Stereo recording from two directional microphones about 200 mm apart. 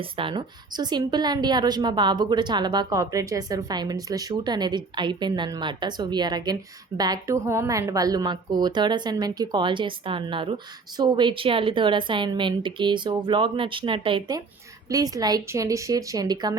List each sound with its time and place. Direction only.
0.0 s a woman's voice: 25° right (ahead or behind)